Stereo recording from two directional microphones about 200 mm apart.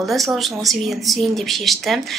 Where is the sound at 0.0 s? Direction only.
Centre (ahead or behind).